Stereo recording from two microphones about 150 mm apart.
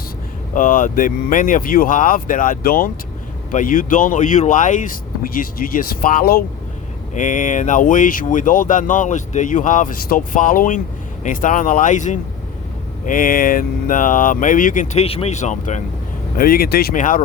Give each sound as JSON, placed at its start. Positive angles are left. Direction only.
{"t": 0.5, "sound": "speech", "side_deg": 65}
{"t": 7.1, "sound": "speech", "side_deg": 60}
{"t": 13.1, "sound": "speech", "side_deg": 65}
{"t": 14.9, "sound": "speech", "side_deg": 40}
{"t": 16.4, "sound": "speech", "side_deg": 85}